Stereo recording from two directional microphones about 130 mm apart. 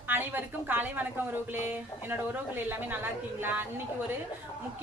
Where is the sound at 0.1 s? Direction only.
15° right (ahead or behind).